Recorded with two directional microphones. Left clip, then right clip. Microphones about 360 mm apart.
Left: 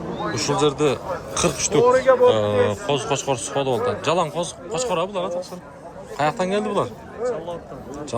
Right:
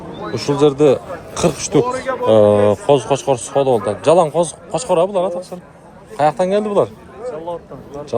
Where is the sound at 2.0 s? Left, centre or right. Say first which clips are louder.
Left 6 dB; left.